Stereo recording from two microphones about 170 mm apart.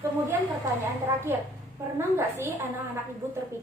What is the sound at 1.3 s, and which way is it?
Speech, 15° right (ahead or behind).